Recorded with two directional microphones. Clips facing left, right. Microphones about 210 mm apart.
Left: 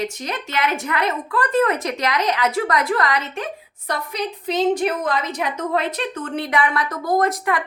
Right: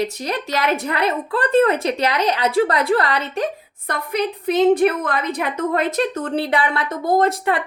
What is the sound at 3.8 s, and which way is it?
A woman's voice, 55° right (ahead or behind).